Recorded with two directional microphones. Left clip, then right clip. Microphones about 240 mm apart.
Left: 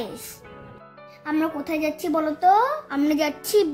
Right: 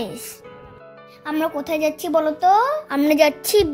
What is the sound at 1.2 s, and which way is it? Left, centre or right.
A woman's voice, right.